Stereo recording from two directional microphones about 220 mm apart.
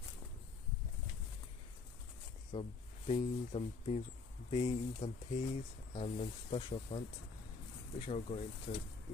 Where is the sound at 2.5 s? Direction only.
25° left (ahead or behind).